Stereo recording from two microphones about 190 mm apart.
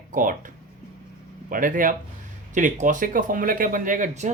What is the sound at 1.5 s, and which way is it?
Speech, 45° right (ahead or behind).